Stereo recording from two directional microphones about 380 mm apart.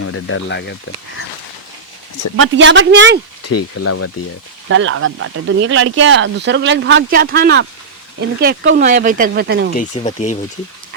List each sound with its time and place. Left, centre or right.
0.0 s speech: left
2.3 s speech: right
3.4 s speech: left
4.7 s speech: right
9.7 s speech: centre